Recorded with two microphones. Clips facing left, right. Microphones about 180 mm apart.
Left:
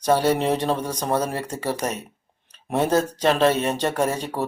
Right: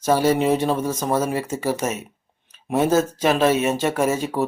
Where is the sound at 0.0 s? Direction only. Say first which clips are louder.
Right 1 dB; 5° right (ahead or behind).